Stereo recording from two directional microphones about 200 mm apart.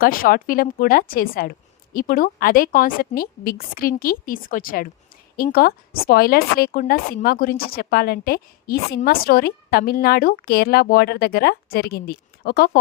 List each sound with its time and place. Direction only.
0.0 s a woman's voice: 45° left (ahead or behind)